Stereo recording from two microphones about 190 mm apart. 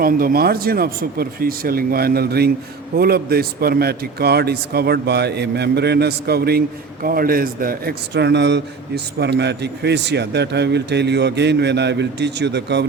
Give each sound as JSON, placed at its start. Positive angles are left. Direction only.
{"t": 0.0, "sound": "a man's voice", "side_deg": -50}